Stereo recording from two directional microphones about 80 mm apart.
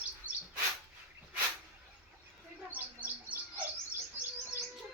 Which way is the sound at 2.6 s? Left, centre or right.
Right.